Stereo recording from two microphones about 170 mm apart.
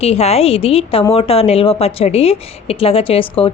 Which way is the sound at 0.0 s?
40° left (ahead or behind).